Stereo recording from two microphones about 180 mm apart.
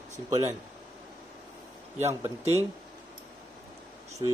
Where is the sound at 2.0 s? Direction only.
15° right (ahead or behind).